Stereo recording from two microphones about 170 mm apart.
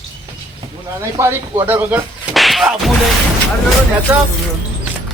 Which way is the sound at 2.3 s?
Centre (ahead or behind).